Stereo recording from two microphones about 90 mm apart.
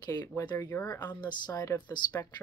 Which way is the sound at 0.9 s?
50° left (ahead or behind).